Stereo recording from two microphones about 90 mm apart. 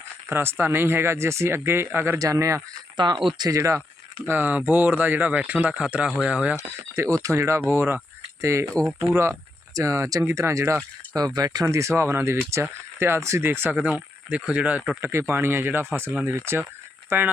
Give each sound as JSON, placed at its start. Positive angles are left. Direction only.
{"t": 0.3, "sound": "speech", "side_deg": -25}
{"t": 2.1, "sound": "speech", "side_deg": -40}
{"t": 3.2, "sound": "speech", "side_deg": -55}
{"t": 3.5, "sound": "speech", "side_deg": -35}
{"t": 4.3, "sound": "speech", "side_deg": -20}
{"t": 6.9, "sound": "speech", "side_deg": -35}
{"t": 9.0, "sound": "speech", "side_deg": -90}
{"t": 9.7, "sound": "speech", "side_deg": -35}
{"t": 11.1, "sound": "speech", "side_deg": -45}
{"t": 11.6, "sound": "speech", "side_deg": -35}
{"t": 13.7, "sound": "speech", "side_deg": -10}
{"t": 15.0, "sound": "speech", "side_deg": -25}